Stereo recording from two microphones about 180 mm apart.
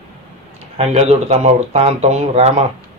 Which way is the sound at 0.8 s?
35° right (ahead or behind).